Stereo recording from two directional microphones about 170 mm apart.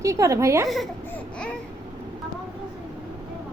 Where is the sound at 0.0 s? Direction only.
20° right (ahead or behind).